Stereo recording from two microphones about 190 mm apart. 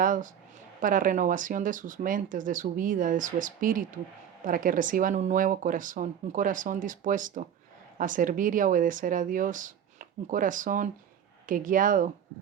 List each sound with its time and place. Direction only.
0.0 s a woman's voice: 45° right (ahead or behind)